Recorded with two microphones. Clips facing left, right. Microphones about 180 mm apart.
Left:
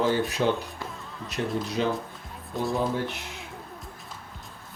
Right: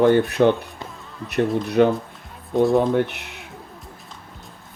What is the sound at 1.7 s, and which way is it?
Speech, 60° right (ahead or behind).